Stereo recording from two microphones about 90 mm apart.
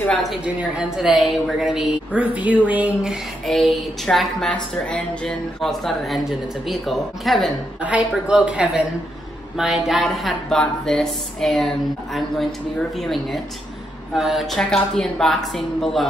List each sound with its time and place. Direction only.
0.6 s speech: 10° right (ahead or behind)
2.1 s speech: 15° right (ahead or behind)
3.4 s speech: centre (ahead or behind)
7.8 s speech: 15° right (ahead or behind); by 16.1 s centre (ahead or behind)